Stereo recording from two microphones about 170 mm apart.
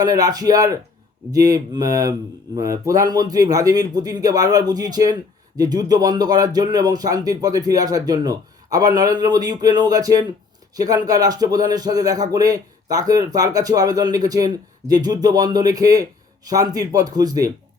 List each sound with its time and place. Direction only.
0.0 s speech: 20° right (ahead or behind)